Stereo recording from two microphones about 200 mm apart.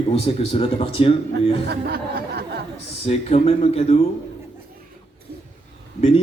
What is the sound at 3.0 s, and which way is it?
Speech, 30° left (ahead or behind).